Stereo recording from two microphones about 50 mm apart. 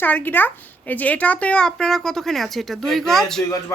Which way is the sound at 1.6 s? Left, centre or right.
Centre.